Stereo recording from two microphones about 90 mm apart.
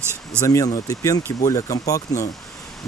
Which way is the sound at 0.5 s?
40° left (ahead or behind).